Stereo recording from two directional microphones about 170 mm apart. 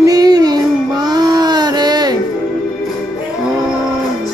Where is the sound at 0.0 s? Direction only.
20° right (ahead or behind).